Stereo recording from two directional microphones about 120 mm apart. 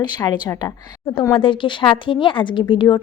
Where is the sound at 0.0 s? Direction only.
35° left (ahead or behind).